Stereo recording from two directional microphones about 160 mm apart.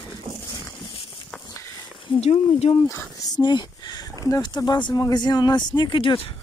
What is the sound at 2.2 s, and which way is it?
Speech, 40° left (ahead or behind).